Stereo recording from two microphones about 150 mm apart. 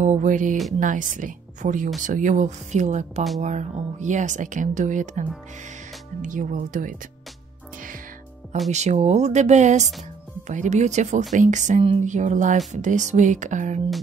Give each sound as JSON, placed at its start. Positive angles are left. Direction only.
{"t": 0.0, "sound": "speech", "side_deg": -55}
{"t": 6.2, "sound": "speech", "side_deg": -60}
{"t": 8.6, "sound": "speech", "side_deg": -50}